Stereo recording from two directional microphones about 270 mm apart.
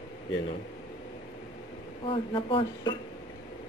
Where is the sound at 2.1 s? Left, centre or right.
Centre.